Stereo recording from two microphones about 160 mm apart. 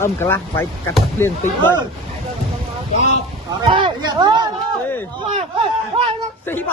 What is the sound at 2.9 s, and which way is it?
Speech, 45° left (ahead or behind).